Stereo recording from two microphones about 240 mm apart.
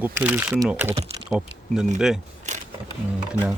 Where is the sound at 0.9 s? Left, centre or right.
Right.